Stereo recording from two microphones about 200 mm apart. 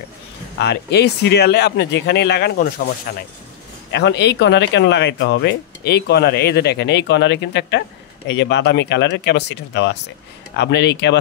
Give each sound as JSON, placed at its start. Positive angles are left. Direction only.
{"t": 0.6, "sound": "speech", "side_deg": 55}
{"t": 3.9, "sound": "speech", "side_deg": 60}